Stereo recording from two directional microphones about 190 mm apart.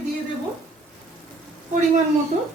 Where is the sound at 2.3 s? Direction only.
35° right (ahead or behind).